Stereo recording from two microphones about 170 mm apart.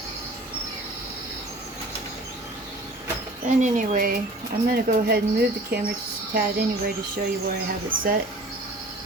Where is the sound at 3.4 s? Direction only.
45° right (ahead or behind).